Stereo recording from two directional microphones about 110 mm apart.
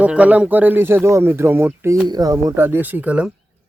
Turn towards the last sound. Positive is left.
turn(degrees=-10)  # may be behind; listen again after turning